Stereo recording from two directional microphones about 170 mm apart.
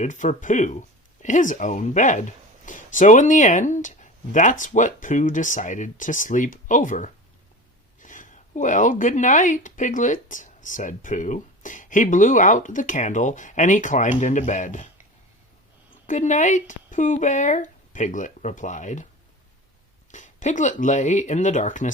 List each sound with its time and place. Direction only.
0.0 s speech: 45° left (ahead or behind)
16.0 s speech: 45° left (ahead or behind)
20.1 s speech: 45° left (ahead or behind)